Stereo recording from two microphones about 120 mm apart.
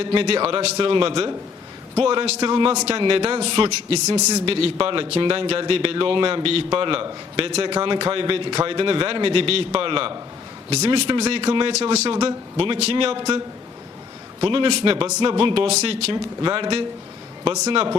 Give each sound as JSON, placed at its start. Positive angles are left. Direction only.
{"t": 0.0, "sound": "a man's voice", "side_deg": -50}
{"t": 2.0, "sound": "a man's voice", "side_deg": -60}
{"t": 2.5, "sound": "a man's voice", "side_deg": -45}
{"t": 2.7, "sound": "a man's voice", "side_deg": -60}
{"t": 3.0, "sound": "a man's voice", "side_deg": -45}
{"t": 4.0, "sound": "a man's voice", "side_deg": -35}
{"t": 4.4, "sound": "a man's voice", "side_deg": -50}
{"t": 14.4, "sound": "a man's voice", "side_deg": -45}
{"t": 16.1, "sound": "a man's voice", "side_deg": -40}